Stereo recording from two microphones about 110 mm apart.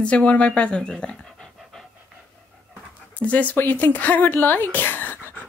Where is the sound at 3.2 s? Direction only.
15° left (ahead or behind).